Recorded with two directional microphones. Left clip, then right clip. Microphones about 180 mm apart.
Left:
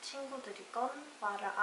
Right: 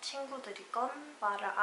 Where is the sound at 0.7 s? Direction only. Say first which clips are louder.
Right 2 dB; 5° left (ahead or behind).